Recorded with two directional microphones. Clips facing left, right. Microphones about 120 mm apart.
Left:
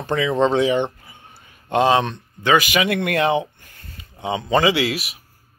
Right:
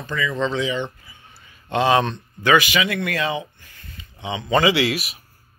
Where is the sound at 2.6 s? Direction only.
50° left (ahead or behind).